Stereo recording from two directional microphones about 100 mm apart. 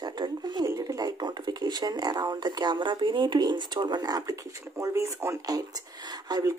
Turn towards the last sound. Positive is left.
turn(degrees=-45)  # may be behind; listen again after turning